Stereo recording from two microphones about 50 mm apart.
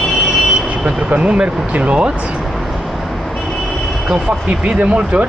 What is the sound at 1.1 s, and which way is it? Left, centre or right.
Speech, right.